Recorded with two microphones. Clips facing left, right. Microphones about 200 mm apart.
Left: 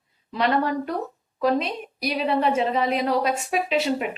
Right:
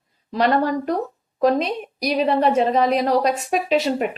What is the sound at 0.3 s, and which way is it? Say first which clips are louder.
A woman's voice: right 4 dB; 35° right (ahead or behind).